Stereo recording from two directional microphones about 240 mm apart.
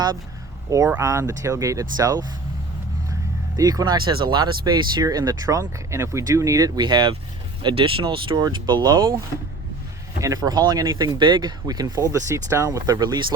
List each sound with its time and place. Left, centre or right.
0.7 s speech: centre
3.6 s speech: centre
10.2 s speech: centre